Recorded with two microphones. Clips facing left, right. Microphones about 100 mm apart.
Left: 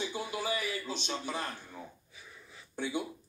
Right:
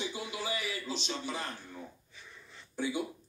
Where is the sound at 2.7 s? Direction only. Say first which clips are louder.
Right 1 dB; 50° left (ahead or behind).